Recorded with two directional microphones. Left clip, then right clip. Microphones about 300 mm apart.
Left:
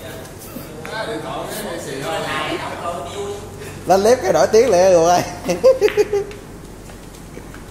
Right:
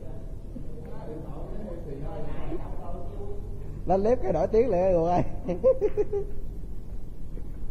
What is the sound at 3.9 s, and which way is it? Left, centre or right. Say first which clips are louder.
Speech: left 11 dB; centre.